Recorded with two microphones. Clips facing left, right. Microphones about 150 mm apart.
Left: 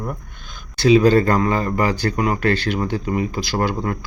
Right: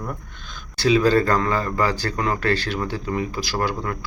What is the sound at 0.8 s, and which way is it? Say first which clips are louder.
Speech: left 4 dB; 20° left (ahead or behind).